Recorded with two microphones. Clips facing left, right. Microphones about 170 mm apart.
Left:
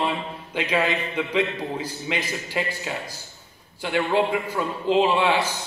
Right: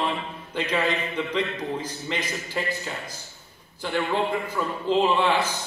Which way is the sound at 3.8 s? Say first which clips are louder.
Left 3 dB; 90° left.